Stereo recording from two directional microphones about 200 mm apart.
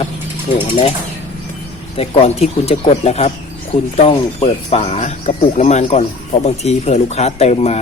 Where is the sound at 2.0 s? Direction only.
30° left (ahead or behind).